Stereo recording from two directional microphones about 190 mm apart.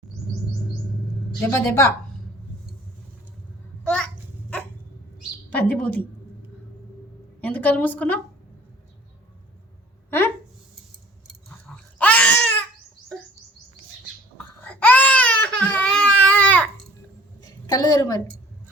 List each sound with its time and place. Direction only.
1.4 s a woman's voice: 15° left (ahead or behind)
3.8 s babbling: 5° left (ahead or behind)
5.5 s a woman's voice: 5° left (ahead or behind)
7.4 s a woman's voice: 10° left (ahead or behind)
11.9 s babbling: 5° left (ahead or behind)
14.3 s baby cry: 10° left (ahead or behind)
17.4 s a sound: 20° left (ahead or behind)